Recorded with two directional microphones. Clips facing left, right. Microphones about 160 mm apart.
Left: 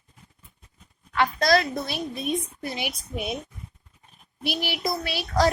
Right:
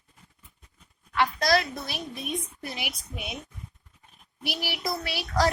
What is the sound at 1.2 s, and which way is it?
A woman's voice, 30° left (ahead or behind).